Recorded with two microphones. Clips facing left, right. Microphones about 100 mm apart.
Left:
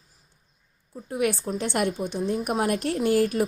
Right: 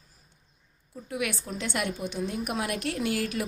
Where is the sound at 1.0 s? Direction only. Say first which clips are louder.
Left 7 dB; 40° left (ahead or behind).